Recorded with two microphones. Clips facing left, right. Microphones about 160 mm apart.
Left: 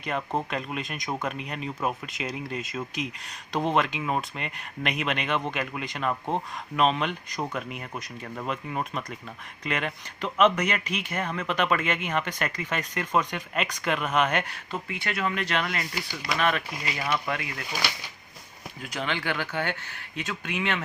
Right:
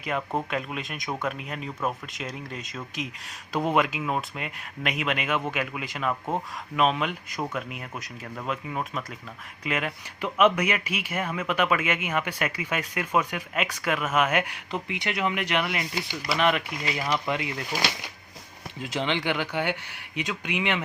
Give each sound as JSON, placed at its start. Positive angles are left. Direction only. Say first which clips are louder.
{"t": 0.0, "sound": "speech", "louder": "even", "side_deg": 0}